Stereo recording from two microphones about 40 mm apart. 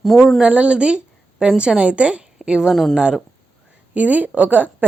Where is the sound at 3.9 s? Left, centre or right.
Right.